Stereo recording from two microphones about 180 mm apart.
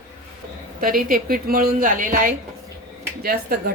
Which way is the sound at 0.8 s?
50° right (ahead or behind).